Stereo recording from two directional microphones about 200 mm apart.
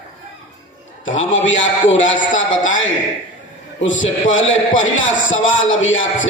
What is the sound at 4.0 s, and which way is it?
Speech, 75° left (ahead or behind).